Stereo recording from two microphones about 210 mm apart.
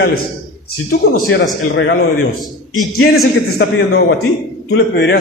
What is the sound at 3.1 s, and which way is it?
A man's voice, 50° left (ahead or behind).